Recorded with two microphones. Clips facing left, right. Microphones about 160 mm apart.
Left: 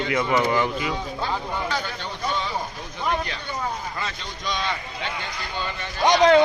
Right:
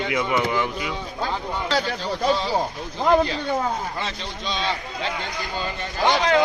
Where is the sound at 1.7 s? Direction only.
80° right.